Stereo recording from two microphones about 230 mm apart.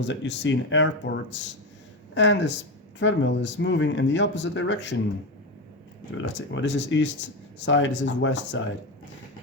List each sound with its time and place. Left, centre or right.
0.0 s speech: left
6.5 s speech: left